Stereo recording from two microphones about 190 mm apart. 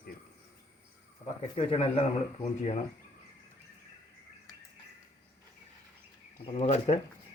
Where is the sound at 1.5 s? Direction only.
30° left (ahead or behind).